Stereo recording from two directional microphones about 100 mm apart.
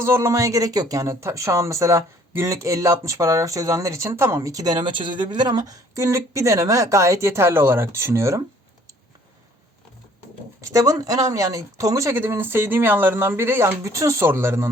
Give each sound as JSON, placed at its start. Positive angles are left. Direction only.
{"t": 0.0, "sound": "speech", "side_deg": -25}
{"t": 10.6, "sound": "speech", "side_deg": -30}